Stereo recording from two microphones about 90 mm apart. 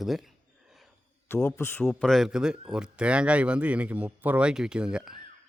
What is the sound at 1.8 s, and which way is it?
Speech, centre (ahead or behind).